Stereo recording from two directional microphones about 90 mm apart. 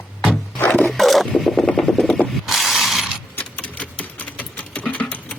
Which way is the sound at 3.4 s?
10° left (ahead or behind).